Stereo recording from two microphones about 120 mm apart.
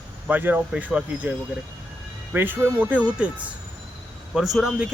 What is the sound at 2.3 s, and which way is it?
Speech, 15° right (ahead or behind).